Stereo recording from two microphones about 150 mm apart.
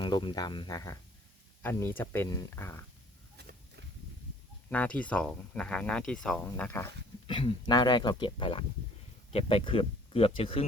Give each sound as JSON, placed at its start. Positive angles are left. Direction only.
{"t": 0.0, "sound": "speech", "side_deg": 30}
{"t": 4.7, "sound": "speech", "side_deg": 10}
{"t": 7.3, "sound": "speech", "side_deg": 35}